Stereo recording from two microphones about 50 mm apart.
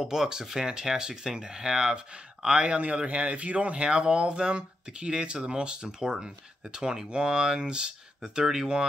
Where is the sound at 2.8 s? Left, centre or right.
Right.